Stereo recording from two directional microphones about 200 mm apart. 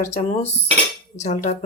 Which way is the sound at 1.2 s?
35° left (ahead or behind).